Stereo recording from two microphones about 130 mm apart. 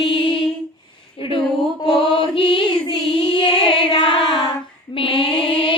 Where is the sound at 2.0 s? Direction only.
40° left (ahead or behind).